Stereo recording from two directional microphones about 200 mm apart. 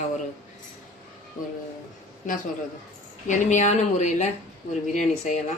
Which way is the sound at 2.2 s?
40° left (ahead or behind).